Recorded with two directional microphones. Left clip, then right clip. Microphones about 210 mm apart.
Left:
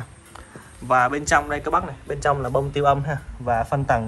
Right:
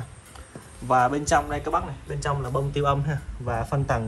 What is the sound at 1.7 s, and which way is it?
A man's voice, 10° right (ahead or behind).